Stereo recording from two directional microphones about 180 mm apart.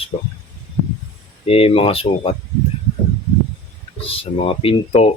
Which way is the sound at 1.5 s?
30° left (ahead or behind).